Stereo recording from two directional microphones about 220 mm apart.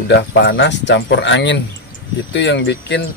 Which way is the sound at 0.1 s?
50° left (ahead or behind).